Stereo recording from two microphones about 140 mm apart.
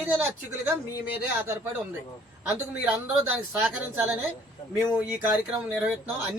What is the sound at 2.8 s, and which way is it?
Speech, 10° right (ahead or behind).